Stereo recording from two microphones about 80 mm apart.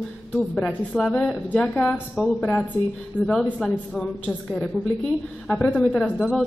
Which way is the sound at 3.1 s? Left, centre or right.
Left.